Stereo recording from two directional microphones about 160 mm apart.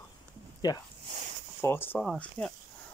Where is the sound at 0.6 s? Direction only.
25° left (ahead or behind).